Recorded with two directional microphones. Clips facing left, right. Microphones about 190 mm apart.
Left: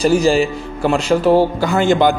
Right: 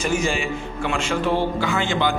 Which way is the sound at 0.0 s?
35° left (ahead or behind).